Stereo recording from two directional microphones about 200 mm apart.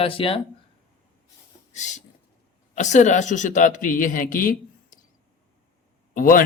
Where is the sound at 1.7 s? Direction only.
35° left (ahead or behind).